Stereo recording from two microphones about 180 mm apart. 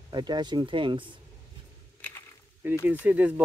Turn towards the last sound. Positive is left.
turn(degrees=-10)  # may be behind; listen again after turning